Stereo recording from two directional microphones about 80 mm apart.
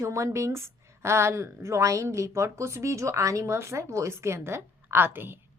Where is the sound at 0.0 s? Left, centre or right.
Right.